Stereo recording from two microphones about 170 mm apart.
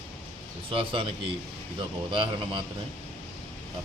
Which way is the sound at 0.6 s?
30° right (ahead or behind).